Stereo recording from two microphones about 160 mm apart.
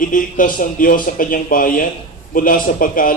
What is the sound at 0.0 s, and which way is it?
A man's voice, 55° left (ahead or behind).